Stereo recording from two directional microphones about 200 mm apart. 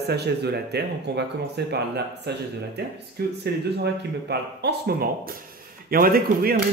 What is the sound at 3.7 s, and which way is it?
Speech, 55° right (ahead or behind).